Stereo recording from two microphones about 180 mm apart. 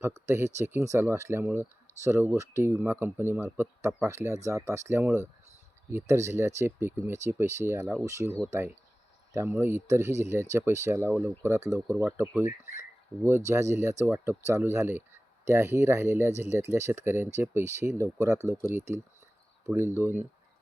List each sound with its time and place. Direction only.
0.3 s speech: 15° right (ahead or behind)
11.9 s speech: 5° right (ahead or behind)
20.0 s speech: 10° right (ahead or behind)